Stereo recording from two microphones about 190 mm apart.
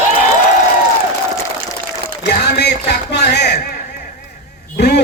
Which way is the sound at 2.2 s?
60° left (ahead or behind).